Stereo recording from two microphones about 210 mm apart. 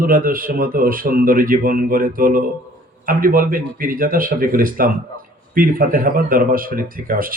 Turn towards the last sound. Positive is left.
turn(degrees=-40)  # may be behind; listen again after turning